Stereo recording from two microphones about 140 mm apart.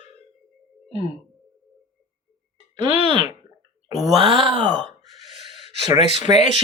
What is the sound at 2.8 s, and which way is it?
Speech, 35° right (ahead or behind).